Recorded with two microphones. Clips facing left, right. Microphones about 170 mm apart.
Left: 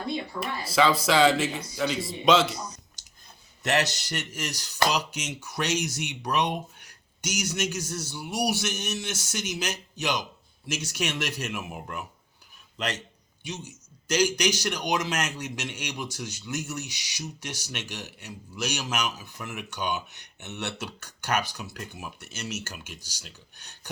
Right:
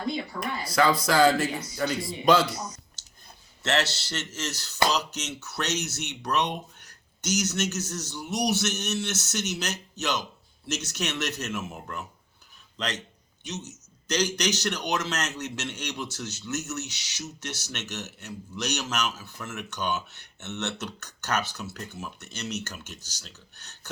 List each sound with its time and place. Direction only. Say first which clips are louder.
0.3 s speech: left 1 dB; 25° left (ahead or behind)
3.0 s scissors: right 1 dB; 15° left (ahead or behind)
3.6 s a man's voice: left 1 dB; 15° left (ahead or behind)